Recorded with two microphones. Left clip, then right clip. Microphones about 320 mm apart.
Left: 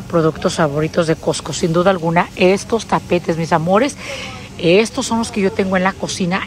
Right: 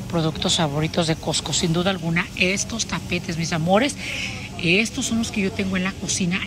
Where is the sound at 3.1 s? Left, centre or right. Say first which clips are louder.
Left 11 dB; centre.